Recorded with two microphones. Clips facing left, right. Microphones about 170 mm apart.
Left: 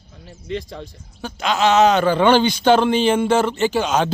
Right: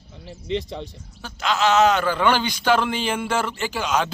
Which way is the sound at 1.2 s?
20° left (ahead or behind).